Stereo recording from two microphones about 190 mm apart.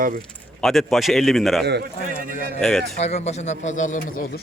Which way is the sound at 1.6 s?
60° right (ahead or behind).